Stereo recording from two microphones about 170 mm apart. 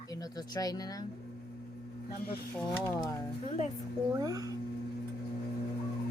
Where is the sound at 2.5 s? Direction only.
15° left (ahead or behind).